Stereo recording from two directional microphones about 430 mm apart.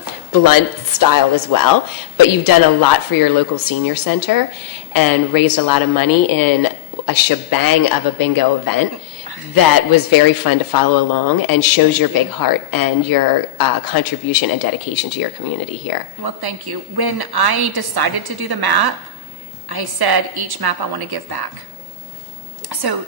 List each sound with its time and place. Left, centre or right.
0.3 s speech: left
9.9 s speech: left
16.2 s a woman's voice: right
22.7 s a woman's voice: right